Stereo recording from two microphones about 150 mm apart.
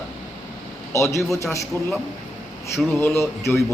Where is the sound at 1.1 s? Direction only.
Centre (ahead or behind).